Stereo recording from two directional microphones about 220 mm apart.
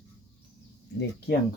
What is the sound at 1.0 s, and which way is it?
Speech, 50° left (ahead or behind).